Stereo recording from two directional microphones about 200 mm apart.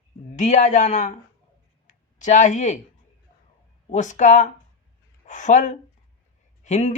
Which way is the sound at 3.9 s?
35° left (ahead or behind).